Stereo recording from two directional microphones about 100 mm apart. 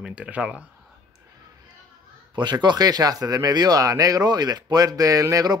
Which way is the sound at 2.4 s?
50° right (ahead or behind).